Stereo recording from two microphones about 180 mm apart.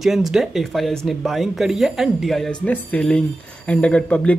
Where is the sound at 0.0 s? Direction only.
Centre (ahead or behind).